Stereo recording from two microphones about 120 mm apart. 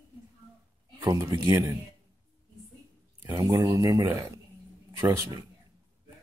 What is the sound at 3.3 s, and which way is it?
Speech, 30° right (ahead or behind).